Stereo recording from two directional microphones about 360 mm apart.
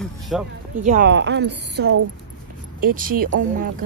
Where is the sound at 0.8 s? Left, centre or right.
Right.